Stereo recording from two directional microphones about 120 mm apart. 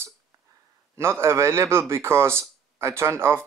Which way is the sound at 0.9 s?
20° right (ahead or behind).